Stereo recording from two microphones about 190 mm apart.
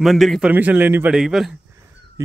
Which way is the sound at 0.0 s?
Centre (ahead or behind).